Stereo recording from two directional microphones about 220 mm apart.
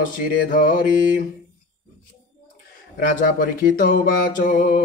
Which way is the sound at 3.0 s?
40° left (ahead or behind).